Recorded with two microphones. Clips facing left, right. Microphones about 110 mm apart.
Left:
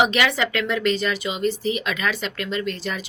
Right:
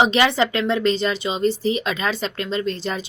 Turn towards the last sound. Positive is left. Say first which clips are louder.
# right 3 dB
turn(degrees=-30)  # may be behind; listen again after turning